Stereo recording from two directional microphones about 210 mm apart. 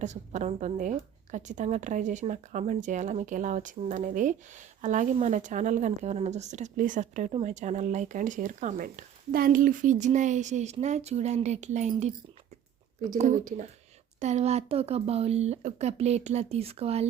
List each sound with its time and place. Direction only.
0.0 s speech: 35° right (ahead or behind)
13.1 s speech: 35° right (ahead or behind)